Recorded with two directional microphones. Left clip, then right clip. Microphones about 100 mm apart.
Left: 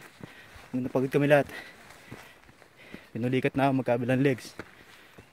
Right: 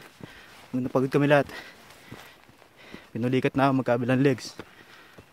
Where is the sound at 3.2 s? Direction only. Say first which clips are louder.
Right 3 dB; 20° right (ahead or behind).